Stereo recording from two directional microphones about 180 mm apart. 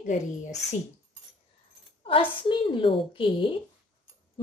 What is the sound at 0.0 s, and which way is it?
Speech, 45° left (ahead or behind).